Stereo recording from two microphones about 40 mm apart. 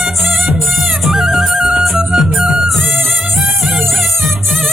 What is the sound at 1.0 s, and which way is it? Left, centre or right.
Music, centre.